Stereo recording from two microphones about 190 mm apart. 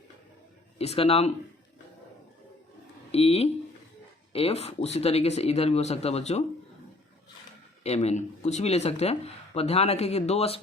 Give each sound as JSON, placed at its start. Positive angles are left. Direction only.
{"t": 0.8, "sound": "speech", "side_deg": 30}
{"t": 3.1, "sound": "speech", "side_deg": 35}
{"t": 7.9, "sound": "speech", "side_deg": 35}